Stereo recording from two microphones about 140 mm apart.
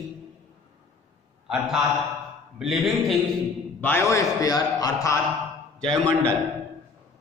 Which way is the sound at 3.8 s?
15° left (ahead or behind).